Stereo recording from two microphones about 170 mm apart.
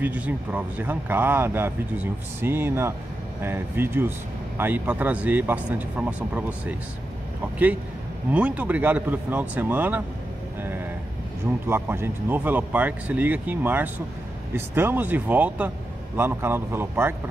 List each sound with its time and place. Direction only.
0.0 s speech: 10° right (ahead or behind)
8.3 s speech: 10° right (ahead or behind)
11.6 s speech: 15° right (ahead or behind)